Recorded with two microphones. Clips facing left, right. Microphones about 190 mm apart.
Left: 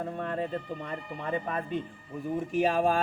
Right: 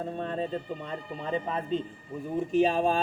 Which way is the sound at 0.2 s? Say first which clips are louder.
Right 1 dB; 25° right (ahead or behind).